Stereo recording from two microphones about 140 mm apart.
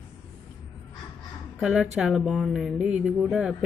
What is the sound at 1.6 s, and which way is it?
Speech, 5° right (ahead or behind).